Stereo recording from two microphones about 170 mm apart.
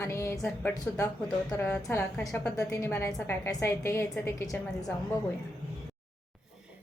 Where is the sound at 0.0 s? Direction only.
15° left (ahead or behind).